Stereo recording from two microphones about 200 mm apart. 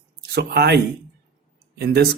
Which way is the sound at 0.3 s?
55° right (ahead or behind).